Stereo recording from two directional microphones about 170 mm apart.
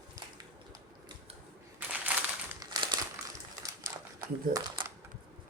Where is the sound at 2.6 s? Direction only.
25° right (ahead or behind).